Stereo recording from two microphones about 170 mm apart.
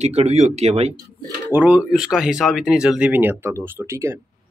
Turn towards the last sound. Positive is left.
turn(degrees=-15)  # may be behind; listen again after turning